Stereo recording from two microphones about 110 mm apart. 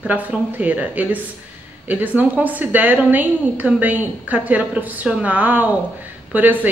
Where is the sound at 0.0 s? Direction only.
10° right (ahead or behind).